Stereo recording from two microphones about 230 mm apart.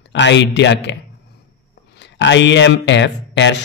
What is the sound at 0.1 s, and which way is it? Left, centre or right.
Speech, left.